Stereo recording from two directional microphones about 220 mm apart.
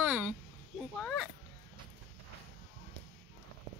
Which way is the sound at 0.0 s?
5° right (ahead or behind).